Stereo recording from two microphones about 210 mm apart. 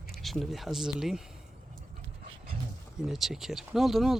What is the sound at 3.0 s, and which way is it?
Speech, centre (ahead or behind).